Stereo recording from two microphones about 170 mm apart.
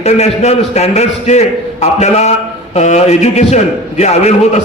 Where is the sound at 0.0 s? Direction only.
40° left (ahead or behind).